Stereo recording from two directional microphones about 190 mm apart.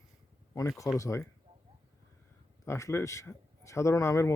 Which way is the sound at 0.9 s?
15° left (ahead or behind).